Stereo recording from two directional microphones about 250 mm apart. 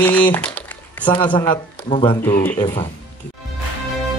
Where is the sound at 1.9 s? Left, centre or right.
Centre.